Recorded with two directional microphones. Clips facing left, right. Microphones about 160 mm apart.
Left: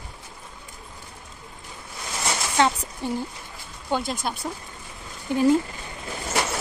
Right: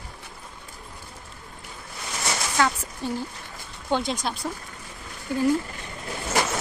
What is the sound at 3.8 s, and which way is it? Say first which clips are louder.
Speech: right 1 dB; 10° left (ahead or behind).